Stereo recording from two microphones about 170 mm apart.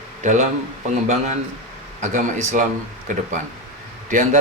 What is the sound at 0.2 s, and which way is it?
Speech, 45° right (ahead or behind).